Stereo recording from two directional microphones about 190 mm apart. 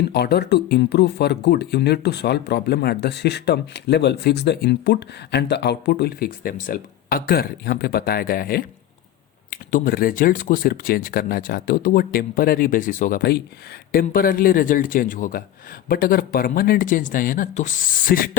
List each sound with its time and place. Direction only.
0.1 s speech: 60° left (ahead or behind)